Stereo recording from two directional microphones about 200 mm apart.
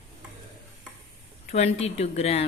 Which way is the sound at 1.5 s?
35° left (ahead or behind).